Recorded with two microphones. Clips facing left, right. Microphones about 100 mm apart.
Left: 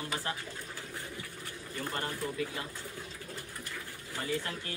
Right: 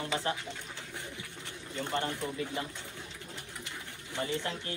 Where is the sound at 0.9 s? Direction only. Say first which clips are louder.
Left 1 dB; 25° right (ahead or behind).